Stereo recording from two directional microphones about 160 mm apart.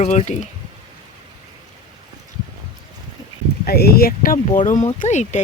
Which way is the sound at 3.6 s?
75° left (ahead or behind).